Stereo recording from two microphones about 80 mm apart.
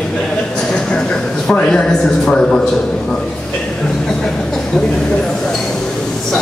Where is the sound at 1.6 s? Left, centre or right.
Centre.